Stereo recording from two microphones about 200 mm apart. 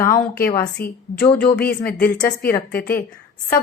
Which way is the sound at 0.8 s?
50° left (ahead or behind).